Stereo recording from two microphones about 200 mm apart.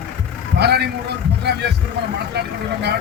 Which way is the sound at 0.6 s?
55° right (ahead or behind).